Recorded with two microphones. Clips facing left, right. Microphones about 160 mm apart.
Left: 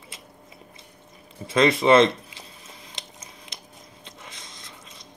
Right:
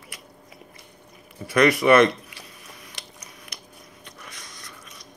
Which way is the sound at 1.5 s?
25° left (ahead or behind).